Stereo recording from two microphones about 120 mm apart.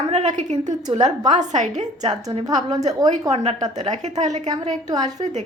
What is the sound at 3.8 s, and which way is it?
Speech, 80° right.